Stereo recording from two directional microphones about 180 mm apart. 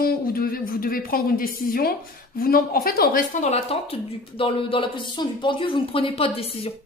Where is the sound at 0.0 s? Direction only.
55° left (ahead or behind).